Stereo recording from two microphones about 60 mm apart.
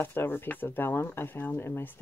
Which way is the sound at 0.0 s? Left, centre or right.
Left.